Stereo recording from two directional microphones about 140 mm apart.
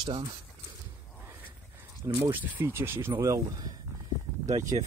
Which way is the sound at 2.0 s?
15° right (ahead or behind).